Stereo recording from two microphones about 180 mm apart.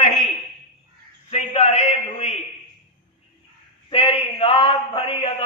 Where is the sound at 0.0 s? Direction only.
45° left (ahead or behind).